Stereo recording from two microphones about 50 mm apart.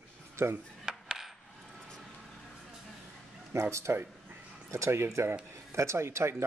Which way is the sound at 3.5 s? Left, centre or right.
Right.